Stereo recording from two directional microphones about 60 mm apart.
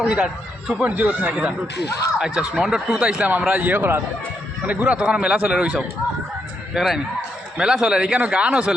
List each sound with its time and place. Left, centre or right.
0.0 s a man's voice: centre
2.1 s a man's voice: centre
3.0 s a man's voice: centre; by 4.0 s right
4.6 s a man's voice: right
6.7 s a man's voice: centre